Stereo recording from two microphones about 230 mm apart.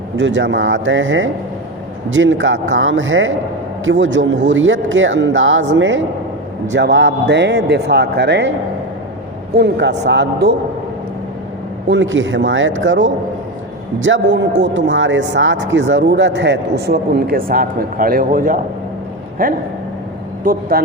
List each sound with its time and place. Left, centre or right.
0.2 s a man's voice: right
9.6 s speech: right
11.9 s a man's voice: right